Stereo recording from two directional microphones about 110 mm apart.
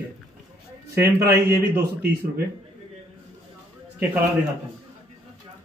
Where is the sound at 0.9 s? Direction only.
25° right (ahead or behind).